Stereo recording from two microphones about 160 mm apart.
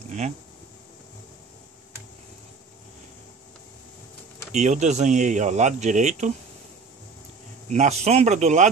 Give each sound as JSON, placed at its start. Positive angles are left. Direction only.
{"t": 4.5, "sound": "speech", "side_deg": -45}
{"t": 7.7, "sound": "speech", "side_deg": -45}